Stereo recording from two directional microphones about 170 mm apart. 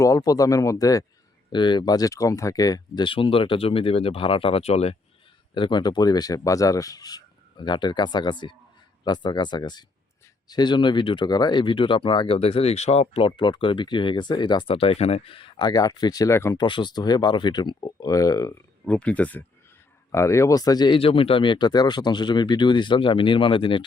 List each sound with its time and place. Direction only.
0.0 s speech: 20° left (ahead or behind); by 4.9 s 40° left (ahead or behind)
5.5 s speech: 25° left (ahead or behind)
16.6 s speech: 25° left (ahead or behind)
18.9 s speech: 10° left (ahead or behind); by 23.8 s 30° left (ahead or behind)